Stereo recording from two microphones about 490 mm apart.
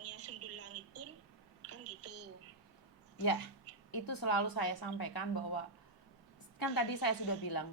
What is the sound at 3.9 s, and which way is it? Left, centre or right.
A woman's voice, left.